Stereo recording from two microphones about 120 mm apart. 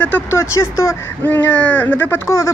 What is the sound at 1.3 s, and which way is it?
Speech, 15° left (ahead or behind).